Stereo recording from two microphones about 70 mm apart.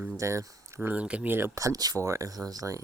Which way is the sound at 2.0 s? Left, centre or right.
Right.